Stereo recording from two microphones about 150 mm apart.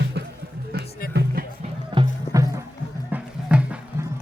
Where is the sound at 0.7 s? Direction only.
90° right.